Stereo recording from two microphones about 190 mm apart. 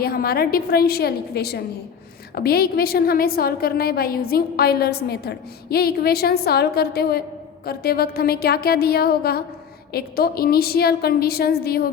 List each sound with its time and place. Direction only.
0.0 s a woman's voice: 50° left (ahead or behind)